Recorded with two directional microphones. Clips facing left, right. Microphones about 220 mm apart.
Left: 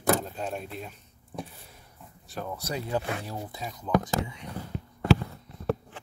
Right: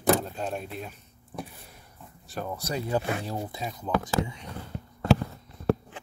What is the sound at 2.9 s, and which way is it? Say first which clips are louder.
Speech: right 2 dB; 10° right (ahead or behind).